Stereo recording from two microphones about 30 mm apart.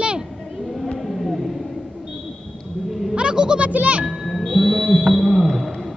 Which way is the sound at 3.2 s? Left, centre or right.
Right.